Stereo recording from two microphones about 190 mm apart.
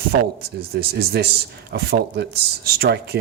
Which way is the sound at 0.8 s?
55° right (ahead or behind).